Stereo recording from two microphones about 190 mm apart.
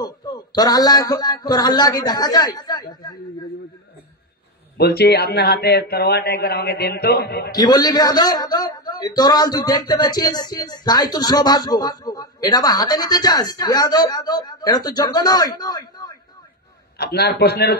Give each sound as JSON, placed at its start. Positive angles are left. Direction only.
{"t": 0.0, "sound": "speech", "side_deg": 20}
{"t": 4.7, "sound": "speech", "side_deg": 60}
{"t": 7.5, "sound": "speech", "side_deg": 20}
{"t": 17.0, "sound": "speech", "side_deg": 60}